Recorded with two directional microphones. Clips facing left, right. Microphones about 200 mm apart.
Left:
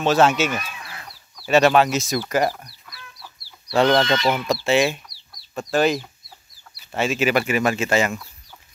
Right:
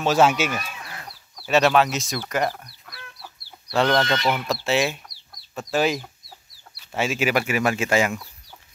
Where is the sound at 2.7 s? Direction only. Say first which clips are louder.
Right 1 dB; 55° right (ahead or behind).